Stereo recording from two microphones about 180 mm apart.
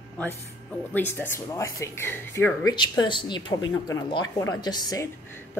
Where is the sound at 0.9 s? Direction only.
10° left (ahead or behind).